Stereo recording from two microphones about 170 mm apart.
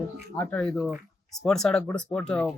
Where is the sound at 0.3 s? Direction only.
10° left (ahead or behind).